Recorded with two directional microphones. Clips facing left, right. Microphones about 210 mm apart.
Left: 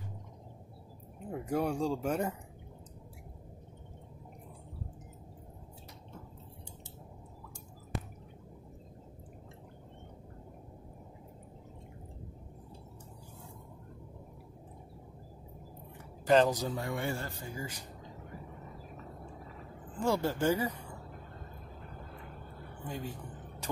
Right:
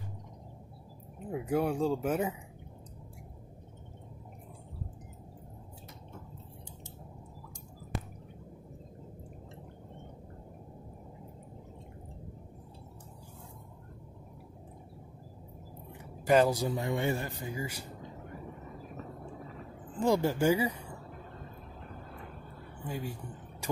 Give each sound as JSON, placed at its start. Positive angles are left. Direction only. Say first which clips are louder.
{"t": 1.3, "sound": "speech", "louder": "right 2 dB", "side_deg": -5}
{"t": 16.3, "sound": "speech", "louder": "right 1 dB", "side_deg": -10}
{"t": 20.0, "sound": "speech", "louder": "right 3 dB", "side_deg": -15}
{"t": 22.8, "sound": "speech", "louder": "right 2 dB", "side_deg": -10}